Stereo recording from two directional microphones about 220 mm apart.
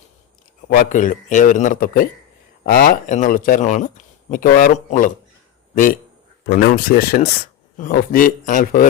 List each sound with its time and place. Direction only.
0.7 s a man's voice: 40° left (ahead or behind)